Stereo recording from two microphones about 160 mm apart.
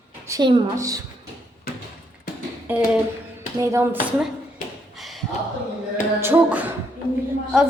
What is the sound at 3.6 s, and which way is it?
Speech, 20° right (ahead or behind).